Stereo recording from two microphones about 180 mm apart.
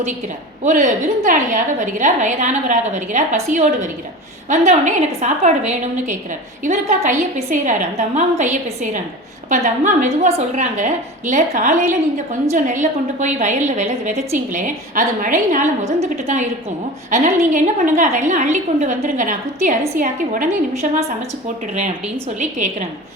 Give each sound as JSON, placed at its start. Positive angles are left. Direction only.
{"t": 0.6, "sound": "a woman's voice", "side_deg": -45}
{"t": 9.5, "sound": "a woman's voice", "side_deg": -45}